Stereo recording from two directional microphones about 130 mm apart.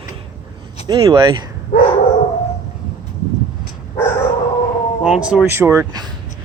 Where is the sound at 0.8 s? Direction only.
35° right (ahead or behind).